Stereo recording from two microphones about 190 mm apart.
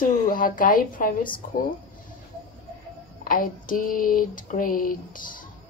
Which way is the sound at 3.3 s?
45° left (ahead or behind).